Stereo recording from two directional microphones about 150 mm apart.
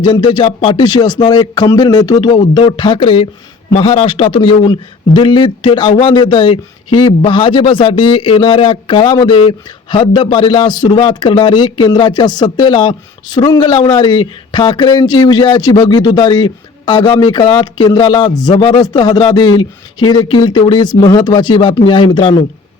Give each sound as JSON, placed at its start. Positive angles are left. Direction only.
{"t": 0.0, "sound": "a man's voice", "side_deg": 30}